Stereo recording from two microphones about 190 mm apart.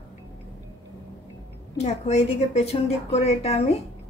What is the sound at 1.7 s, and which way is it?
A woman's voice, 35° left (ahead or behind).